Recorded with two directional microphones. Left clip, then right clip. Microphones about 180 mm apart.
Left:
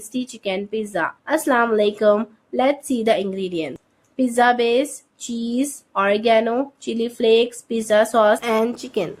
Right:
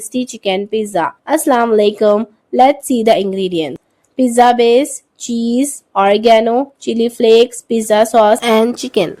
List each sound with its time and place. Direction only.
0.1 s speech: 35° right (ahead or behind)